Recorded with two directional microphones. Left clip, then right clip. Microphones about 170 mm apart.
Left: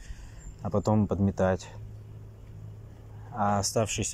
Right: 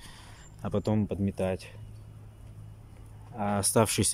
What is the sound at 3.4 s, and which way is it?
Speech, 25° right (ahead or behind).